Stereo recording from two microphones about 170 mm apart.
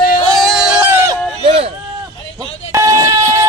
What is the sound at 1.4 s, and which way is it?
Speech, 35° right (ahead or behind).